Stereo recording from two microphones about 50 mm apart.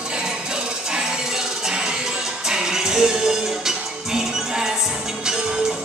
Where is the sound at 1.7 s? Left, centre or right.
Centre.